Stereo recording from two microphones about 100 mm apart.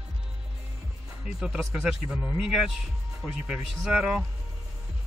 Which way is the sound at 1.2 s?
5° right (ahead or behind).